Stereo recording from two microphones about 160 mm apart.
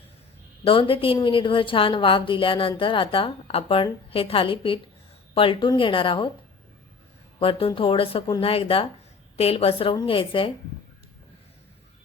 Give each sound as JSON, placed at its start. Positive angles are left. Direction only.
{"t": 0.6, "sound": "a woman's voice", "side_deg": 35}
{"t": 7.3, "sound": "a woman's voice", "side_deg": 35}